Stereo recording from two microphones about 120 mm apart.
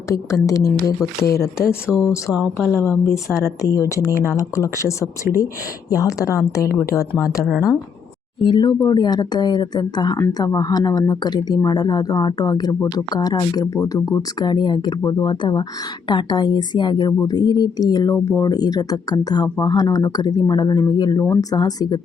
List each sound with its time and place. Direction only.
0.1 s a woman's voice: 30° left (ahead or behind)
2.3 s speech: 5° right (ahead or behind)
2.7 s a woman's voice: 20° left (ahead or behind)
8.4 s speech: 40° left (ahead or behind)